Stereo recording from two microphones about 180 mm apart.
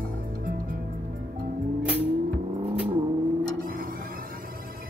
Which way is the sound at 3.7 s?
50° right (ahead or behind).